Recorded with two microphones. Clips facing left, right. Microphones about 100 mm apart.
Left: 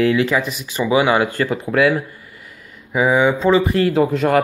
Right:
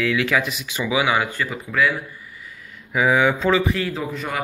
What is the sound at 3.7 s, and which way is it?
Speech, 50° left (ahead or behind).